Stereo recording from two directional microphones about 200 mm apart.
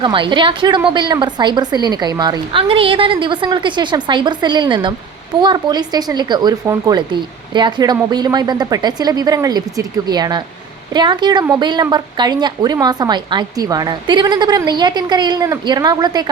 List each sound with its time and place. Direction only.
0.0 s a woman's voice: 25° right (ahead or behind)